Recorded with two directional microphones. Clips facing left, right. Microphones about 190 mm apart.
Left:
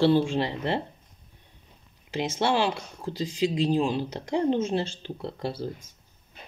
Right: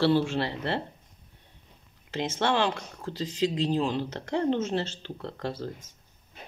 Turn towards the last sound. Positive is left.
turn(degrees=10)  # may be behind; listen again after turning